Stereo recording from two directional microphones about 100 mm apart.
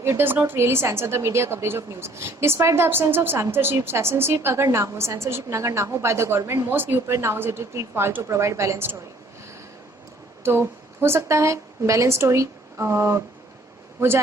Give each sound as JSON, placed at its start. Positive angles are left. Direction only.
{"t": 0.0, "sound": "a woman's voice", "side_deg": -25}
{"t": 10.4, "sound": "a woman's voice", "side_deg": -25}